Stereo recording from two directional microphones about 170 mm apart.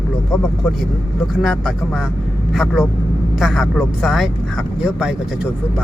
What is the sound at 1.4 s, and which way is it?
Speech, centre (ahead or behind).